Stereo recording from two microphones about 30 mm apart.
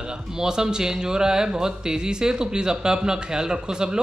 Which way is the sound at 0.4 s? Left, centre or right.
Right.